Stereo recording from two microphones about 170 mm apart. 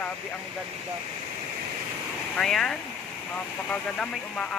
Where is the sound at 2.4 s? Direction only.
5° left (ahead or behind).